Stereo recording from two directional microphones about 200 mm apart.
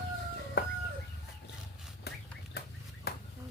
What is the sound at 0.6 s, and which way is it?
Chicken, 55° left (ahead or behind).